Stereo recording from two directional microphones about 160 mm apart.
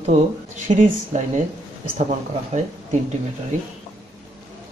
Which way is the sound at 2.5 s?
40° right (ahead or behind).